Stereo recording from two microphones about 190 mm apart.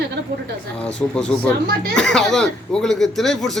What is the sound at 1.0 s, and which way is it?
Speech, 5° left (ahead or behind).